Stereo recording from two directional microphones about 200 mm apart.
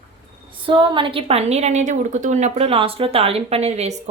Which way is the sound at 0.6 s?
25° right (ahead or behind).